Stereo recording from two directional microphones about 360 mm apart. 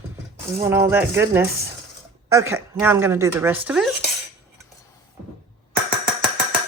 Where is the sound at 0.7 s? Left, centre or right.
Centre.